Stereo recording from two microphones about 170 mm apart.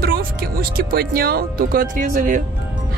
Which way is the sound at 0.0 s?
60° right (ahead or behind).